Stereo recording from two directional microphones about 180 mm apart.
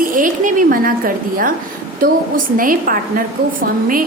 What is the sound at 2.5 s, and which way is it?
A woman's voice, 50° right (ahead or behind).